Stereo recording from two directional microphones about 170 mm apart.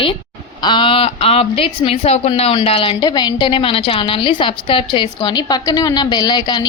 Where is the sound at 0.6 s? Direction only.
30° left (ahead or behind).